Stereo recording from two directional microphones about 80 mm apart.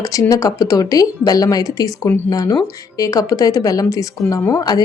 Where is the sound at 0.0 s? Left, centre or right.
Left.